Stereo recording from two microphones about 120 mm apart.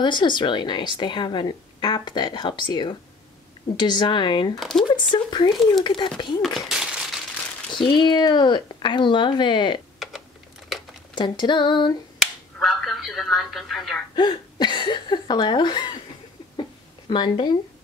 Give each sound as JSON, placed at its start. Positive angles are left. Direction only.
{"t": 0.0, "sound": "a woman's voice", "side_deg": 40}
{"t": 4.6, "sound": "speech", "side_deg": 5}
{"t": 4.8, "sound": "speech", "side_deg": 40}
{"t": 6.4, "sound": "a sound", "side_deg": 0}
{"t": 7.7, "sound": "a woman's voice", "side_deg": 40}
{"t": 10.0, "sound": "typing", "side_deg": 0}
{"t": 11.1, "sound": "a woman's voice", "side_deg": 40}
{"t": 12.5, "sound": "speech", "side_deg": 0}
{"t": 14.1, "sound": "speech", "side_deg": 40}
{"t": 17.1, "sound": "a woman's voice", "side_deg": 40}